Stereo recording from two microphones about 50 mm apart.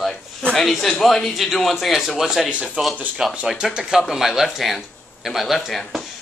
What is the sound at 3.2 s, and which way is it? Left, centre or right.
Speech, centre.